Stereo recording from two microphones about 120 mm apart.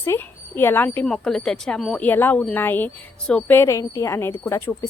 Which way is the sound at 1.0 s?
5° left (ahead or behind).